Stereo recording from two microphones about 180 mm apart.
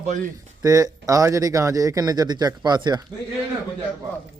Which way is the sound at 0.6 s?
20° right (ahead or behind).